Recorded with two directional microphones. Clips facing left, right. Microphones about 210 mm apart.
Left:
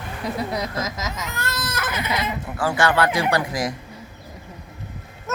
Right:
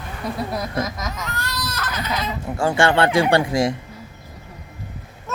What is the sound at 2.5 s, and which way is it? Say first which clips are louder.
Speech: right 3 dB; 25° right (ahead or behind).